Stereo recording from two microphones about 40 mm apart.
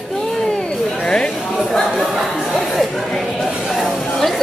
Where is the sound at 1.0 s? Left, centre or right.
Centre.